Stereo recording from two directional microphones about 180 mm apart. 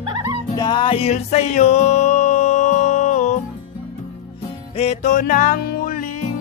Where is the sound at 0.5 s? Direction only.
25° left (ahead or behind); by 3.4 s 40° left (ahead or behind).